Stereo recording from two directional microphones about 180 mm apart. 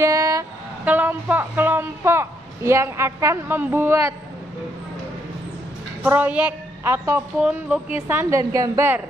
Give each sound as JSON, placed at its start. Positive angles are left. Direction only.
{"t": 0.0, "sound": "a sound", "side_deg": -20}
{"t": 0.8, "sound": "a man's voice", "side_deg": -10}
{"t": 6.0, "sound": "a woman's voice", "side_deg": -10}